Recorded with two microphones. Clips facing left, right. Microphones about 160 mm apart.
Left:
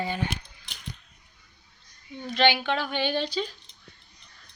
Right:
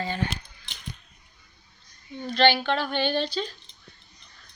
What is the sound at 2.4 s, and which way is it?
Speech, 10° left (ahead or behind).